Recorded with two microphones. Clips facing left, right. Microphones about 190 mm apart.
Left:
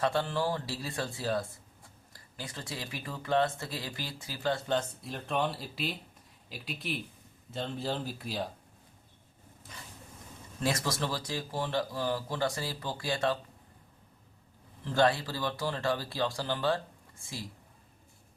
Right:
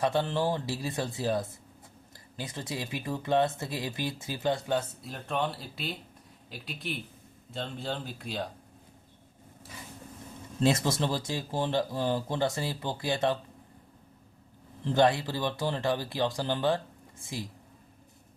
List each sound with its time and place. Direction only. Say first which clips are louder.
0.0 s speech: right 2 dB; 20° right (ahead or behind); by 8.4 s centre (ahead or behind)
10.6 s speech: right 5 dB; 25° right (ahead or behind)
14.8 s speech: right 3 dB; 20° right (ahead or behind)